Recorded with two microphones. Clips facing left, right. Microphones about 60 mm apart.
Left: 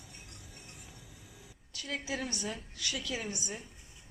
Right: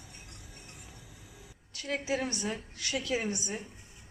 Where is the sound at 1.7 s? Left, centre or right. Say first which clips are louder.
Right 5 dB; right.